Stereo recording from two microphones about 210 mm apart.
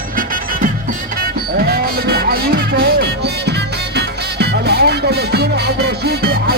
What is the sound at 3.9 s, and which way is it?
Music, 50° right (ahead or behind).